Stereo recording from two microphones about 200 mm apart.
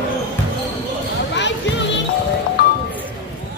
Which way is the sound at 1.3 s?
60° left (ahead or behind).